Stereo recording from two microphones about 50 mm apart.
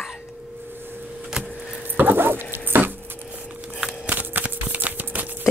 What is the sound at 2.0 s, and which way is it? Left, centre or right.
Dog, right.